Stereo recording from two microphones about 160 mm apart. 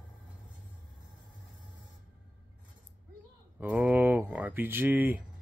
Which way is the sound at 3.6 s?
10° right (ahead or behind).